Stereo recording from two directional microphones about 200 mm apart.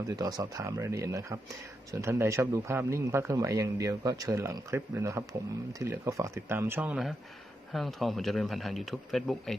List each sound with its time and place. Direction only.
0.0 s a man's voice: 20° right (ahead or behind); by 9.6 s centre (ahead or behind)